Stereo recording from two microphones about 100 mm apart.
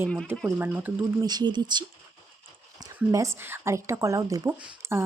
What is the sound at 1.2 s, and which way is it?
Speech, 45° right (ahead or behind).